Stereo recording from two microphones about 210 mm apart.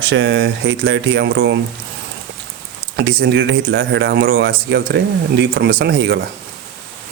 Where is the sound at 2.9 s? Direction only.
55° right (ahead or behind).